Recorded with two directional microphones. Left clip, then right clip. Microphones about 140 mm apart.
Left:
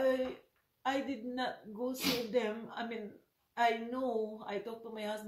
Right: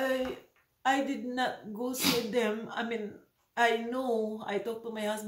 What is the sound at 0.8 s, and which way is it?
Speech, 20° right (ahead or behind).